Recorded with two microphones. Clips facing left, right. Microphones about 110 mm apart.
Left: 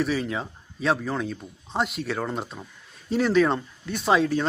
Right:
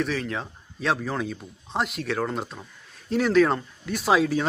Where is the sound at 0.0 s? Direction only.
5° left (ahead or behind).